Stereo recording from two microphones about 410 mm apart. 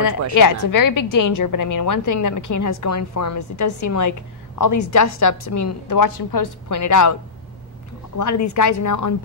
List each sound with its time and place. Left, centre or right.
0.3 s a woman's voice: left
8.2 s a woman's voice: left